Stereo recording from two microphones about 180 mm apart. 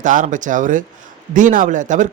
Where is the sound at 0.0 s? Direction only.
45° right (ahead or behind).